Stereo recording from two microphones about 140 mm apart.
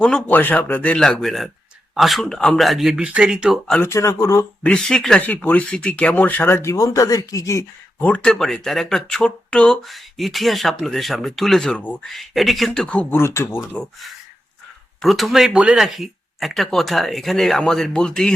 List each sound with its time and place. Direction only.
0.0 s speech: 10° left (ahead or behind)
3.7 s speech: 15° left (ahead or behind)
4.6 s speech: 5° left (ahead or behind); by 7.6 s 25° left (ahead or behind)
8.0 s speech: 10° left (ahead or behind)
15.0 s speech: centre (ahead or behind)